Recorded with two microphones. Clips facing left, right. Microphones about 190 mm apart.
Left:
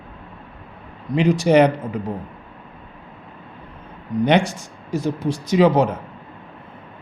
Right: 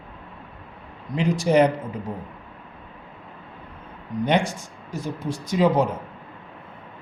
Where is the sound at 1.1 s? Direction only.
75° left (ahead or behind).